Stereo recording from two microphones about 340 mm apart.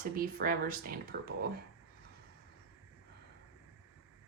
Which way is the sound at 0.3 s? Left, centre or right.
Right.